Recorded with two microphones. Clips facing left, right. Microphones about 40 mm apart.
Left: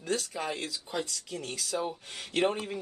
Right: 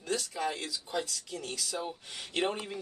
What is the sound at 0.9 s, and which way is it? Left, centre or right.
Speech, centre.